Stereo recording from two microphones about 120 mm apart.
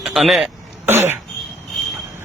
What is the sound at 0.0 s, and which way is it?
Speech, centre (ahead or behind).